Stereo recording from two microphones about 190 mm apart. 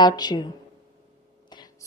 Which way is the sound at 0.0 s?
20° left (ahead or behind).